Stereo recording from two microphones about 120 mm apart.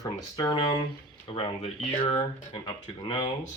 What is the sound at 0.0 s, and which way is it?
Speech, 30° left (ahead or behind).